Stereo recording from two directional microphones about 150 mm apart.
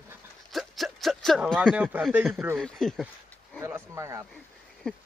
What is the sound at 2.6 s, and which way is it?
Speech, 5° left (ahead or behind).